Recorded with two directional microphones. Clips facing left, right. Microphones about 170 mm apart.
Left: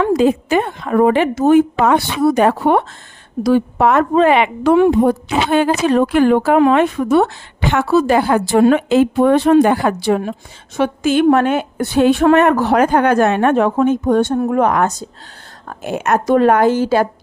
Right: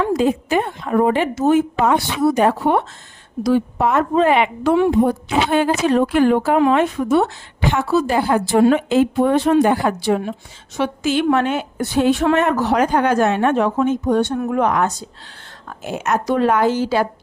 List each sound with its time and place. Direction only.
0.0 s a woman's voice: 85° left; by 14.3 s 50° left (ahead or behind)
14.3 s speech: 35° left (ahead or behind)
14.6 s a woman's voice: 50° left (ahead or behind)